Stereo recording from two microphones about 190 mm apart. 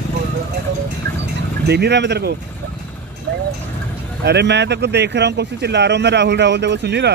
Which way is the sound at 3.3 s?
65° right (ahead or behind).